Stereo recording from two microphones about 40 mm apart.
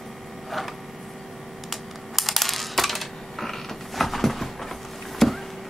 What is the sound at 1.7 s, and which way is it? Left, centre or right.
Coin, centre.